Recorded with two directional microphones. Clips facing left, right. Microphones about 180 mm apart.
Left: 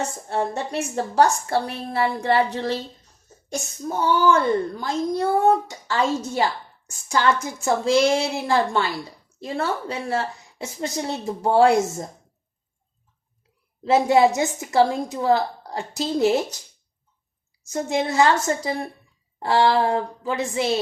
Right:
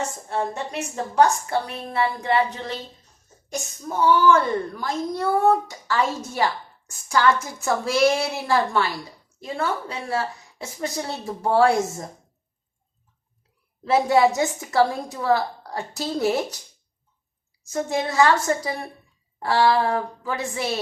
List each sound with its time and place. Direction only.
0.3 s a woman's voice: 30° left (ahead or behind)
13.8 s speech: 20° left (ahead or behind)
17.7 s speech: 25° left (ahead or behind)